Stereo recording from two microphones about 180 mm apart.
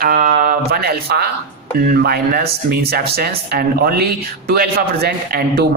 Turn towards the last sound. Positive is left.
turn(degrees=-60)  # may be behind; listen again after turning